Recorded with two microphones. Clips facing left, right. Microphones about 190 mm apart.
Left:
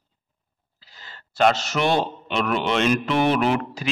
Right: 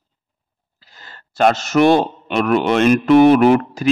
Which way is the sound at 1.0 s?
50° right (ahead or behind).